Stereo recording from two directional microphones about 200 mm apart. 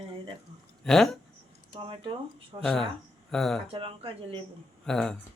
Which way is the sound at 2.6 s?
5° left (ahead or behind).